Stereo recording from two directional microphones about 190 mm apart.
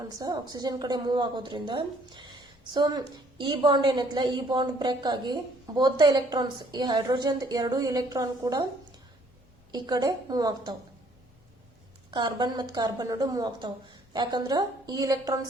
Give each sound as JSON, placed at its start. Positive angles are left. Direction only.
{"t": 0.2, "sound": "a woman's voice", "side_deg": -20}
{"t": 9.7, "sound": "a woman's voice", "side_deg": -20}
{"t": 12.1, "sound": "a woman's voice", "side_deg": -25}